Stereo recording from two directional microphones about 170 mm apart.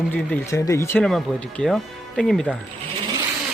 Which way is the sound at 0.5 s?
20° left (ahead or behind).